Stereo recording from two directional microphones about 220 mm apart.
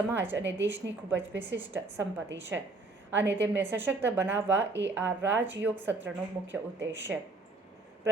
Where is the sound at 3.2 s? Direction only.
50° right (ahead or behind).